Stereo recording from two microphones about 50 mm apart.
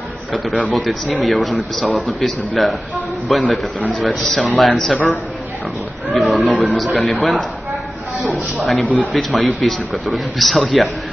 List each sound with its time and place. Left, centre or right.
0.3 s speech: centre
4.9 s a man's voice: left
6.0 s a man's voice: centre